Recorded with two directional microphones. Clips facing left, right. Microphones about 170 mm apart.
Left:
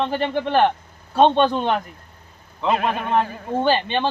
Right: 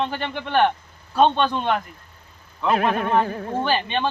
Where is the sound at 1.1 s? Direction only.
30° left (ahead or behind).